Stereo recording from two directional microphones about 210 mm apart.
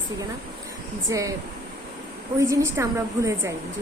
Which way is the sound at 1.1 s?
15° right (ahead or behind).